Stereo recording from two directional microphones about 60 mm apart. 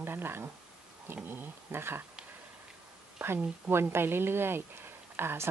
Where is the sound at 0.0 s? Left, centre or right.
Right.